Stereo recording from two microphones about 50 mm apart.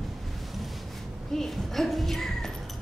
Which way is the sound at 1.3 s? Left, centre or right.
Centre.